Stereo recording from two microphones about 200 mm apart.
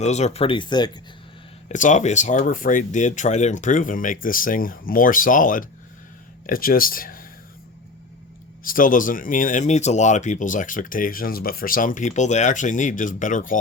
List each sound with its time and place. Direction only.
0.0 s speech: 35° left (ahead or behind)
1.6 s speech: 40° left (ahead or behind)
8.6 s speech: 45° left (ahead or behind)